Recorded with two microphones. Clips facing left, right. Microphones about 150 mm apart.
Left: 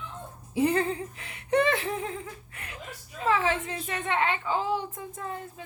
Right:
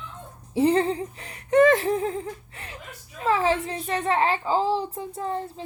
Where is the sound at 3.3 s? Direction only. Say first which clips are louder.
Right 4 dB; 35° right (ahead or behind).